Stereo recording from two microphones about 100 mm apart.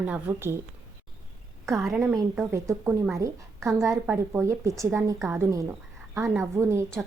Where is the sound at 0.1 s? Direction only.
20° right (ahead or behind).